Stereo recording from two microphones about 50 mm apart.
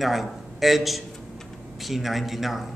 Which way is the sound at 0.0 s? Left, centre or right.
Centre.